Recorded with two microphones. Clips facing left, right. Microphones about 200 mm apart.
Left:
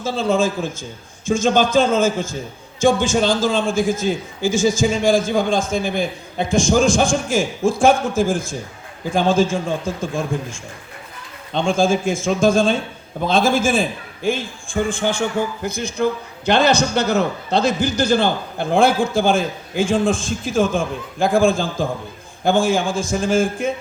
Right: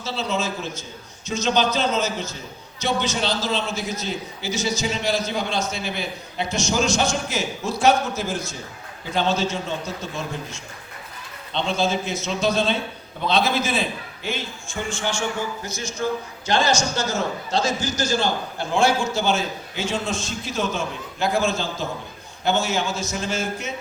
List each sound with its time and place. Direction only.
0.0 s a man's voice: 50° left (ahead or behind)